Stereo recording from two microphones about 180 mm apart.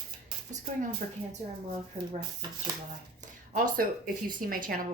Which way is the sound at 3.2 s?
50° right (ahead or behind).